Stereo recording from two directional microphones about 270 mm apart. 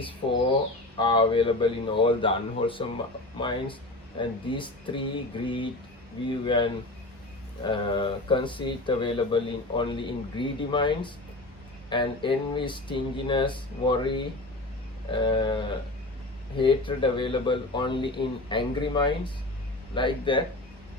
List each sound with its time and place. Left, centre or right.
0.0 s speech: centre
15.1 s speech: centre